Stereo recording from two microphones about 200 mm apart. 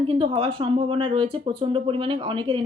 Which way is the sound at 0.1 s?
25° right (ahead or behind).